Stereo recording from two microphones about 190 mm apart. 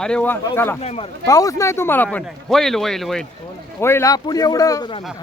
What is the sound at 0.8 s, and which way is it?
Speech, 30° left (ahead or behind).